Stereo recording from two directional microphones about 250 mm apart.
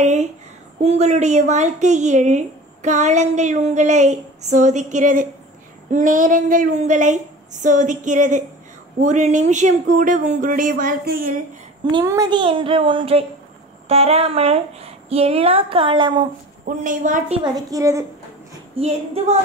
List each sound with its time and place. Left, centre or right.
0.0 s a woman's voice: right
11.8 s a woman's voice: centre
16.6 s speech: right
17.4 s a woman's voice: centre
18.8 s a woman's voice: right